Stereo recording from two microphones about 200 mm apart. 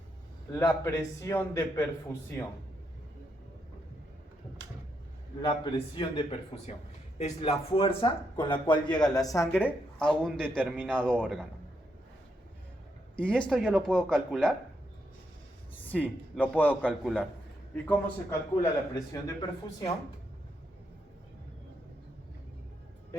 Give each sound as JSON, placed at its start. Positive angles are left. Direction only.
{"t": 0.5, "sound": "a man's voice", "side_deg": 15}
{"t": 5.4, "sound": "speech", "side_deg": 20}
{"t": 13.1, "sound": "speech", "side_deg": 5}
{"t": 15.8, "sound": "a man's voice", "side_deg": 5}
{"t": 17.8, "sound": "a man's voice", "side_deg": 15}